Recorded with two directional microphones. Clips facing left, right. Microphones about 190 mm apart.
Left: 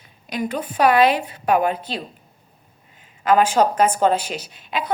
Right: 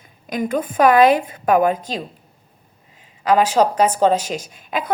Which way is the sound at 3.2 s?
35° right (ahead or behind).